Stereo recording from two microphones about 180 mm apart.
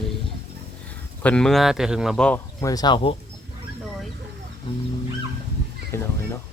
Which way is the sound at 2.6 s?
20° left (ahead or behind).